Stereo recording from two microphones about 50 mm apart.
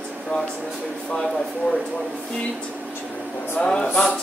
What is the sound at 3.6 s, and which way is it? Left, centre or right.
Speech, centre.